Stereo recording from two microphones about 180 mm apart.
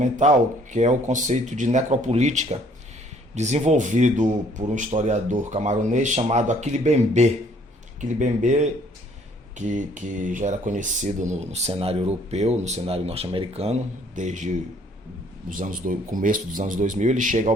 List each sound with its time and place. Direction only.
0.0 s speech: 40° right (ahead or behind)